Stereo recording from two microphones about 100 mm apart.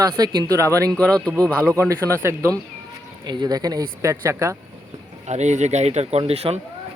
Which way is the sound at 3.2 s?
45° right (ahead or behind).